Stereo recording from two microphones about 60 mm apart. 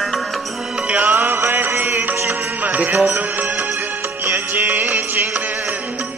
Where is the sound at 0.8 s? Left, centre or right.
Right.